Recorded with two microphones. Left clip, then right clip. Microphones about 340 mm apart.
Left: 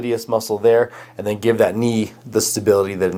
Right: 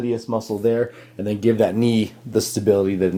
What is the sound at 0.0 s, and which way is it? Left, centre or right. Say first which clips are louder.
Speech: left 4 dB; left.